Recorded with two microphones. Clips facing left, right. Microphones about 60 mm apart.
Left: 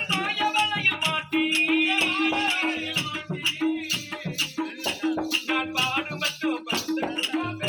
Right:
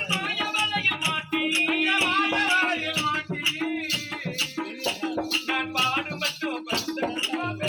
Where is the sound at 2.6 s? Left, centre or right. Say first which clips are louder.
Right 1 dB; right.